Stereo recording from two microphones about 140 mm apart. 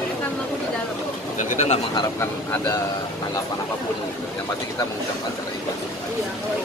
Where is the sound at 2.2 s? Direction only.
20° left (ahead or behind).